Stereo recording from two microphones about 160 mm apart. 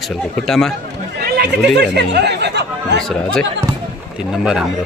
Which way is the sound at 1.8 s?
90° right.